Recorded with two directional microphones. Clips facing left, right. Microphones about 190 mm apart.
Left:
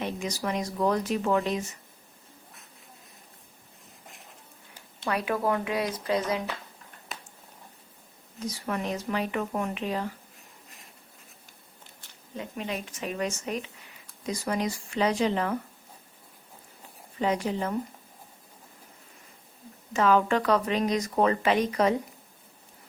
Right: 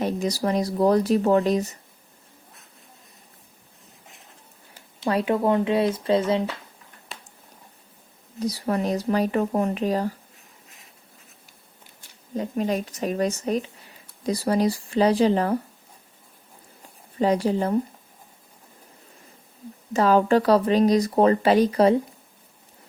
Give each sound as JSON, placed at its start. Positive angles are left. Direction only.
{"t": 0.0, "sound": "speech", "side_deg": -35}
{"t": 5.0, "sound": "speech", "side_deg": -30}
{"t": 8.4, "sound": "speech", "side_deg": -35}
{"t": 12.3, "sound": "speech", "side_deg": -40}
{"t": 17.2, "sound": "speech", "side_deg": -35}
{"t": 19.9, "sound": "speech", "side_deg": -35}